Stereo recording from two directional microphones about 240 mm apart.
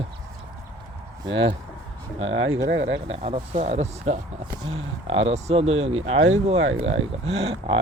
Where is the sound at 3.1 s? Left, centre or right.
Right.